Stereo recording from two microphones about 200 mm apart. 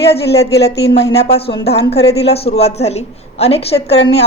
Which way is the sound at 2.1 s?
30° left (ahead or behind).